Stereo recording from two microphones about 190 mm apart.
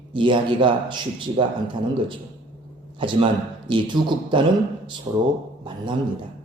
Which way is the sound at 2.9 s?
25° right (ahead or behind).